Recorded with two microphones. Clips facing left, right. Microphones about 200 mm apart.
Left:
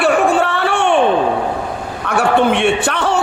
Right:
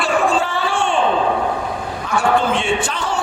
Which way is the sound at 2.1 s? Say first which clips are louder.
Left 4 dB; 65° left (ahead or behind).